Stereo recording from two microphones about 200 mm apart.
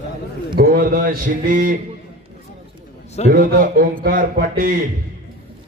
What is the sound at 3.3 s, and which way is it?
A man's voice, 45° right (ahead or behind).